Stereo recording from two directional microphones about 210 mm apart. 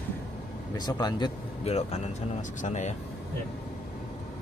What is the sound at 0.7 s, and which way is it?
Speech, 20° left (ahead or behind).